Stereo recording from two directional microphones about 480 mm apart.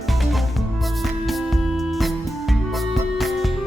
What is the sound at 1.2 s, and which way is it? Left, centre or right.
Music, centre.